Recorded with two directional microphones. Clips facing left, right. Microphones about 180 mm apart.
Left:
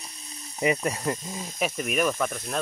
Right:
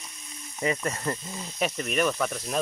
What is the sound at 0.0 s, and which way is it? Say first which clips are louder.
Snake: left 1 dB; 35° left (ahead or behind).